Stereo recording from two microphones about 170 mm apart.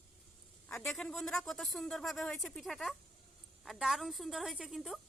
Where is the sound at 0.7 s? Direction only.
Centre (ahead or behind).